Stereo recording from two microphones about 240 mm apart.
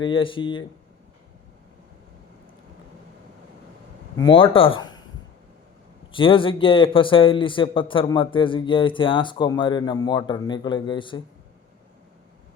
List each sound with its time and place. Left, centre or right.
0.0 s a man's voice: left
4.2 s a man's voice: left
6.1 s a man's voice: left